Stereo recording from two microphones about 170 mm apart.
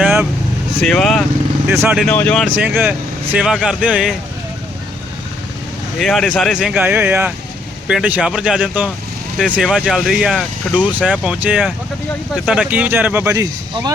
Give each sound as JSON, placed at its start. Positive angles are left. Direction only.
{"t": 0.0, "sound": "vehicle", "side_deg": -5}
{"t": 0.8, "sound": "speech", "side_deg": 0}
{"t": 1.6, "sound": "speech", "side_deg": -10}
{"t": 2.0, "sound": "speech", "side_deg": 10}
{"t": 2.6, "sound": "speech", "side_deg": -10}
{"t": 6.0, "sound": "speech", "side_deg": 0}